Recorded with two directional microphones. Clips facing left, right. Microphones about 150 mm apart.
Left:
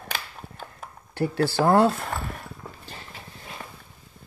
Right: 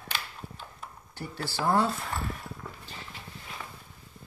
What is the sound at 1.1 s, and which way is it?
Speech, 70° left (ahead or behind).